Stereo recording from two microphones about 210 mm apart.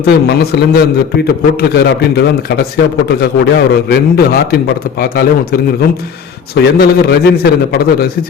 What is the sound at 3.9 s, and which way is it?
A man's voice, 50° left (ahead or behind).